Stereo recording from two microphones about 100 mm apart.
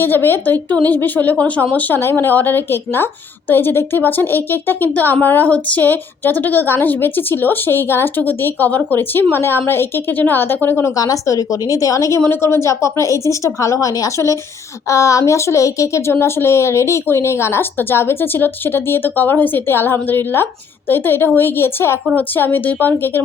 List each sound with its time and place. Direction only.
0.0 s speech: 20° left (ahead or behind)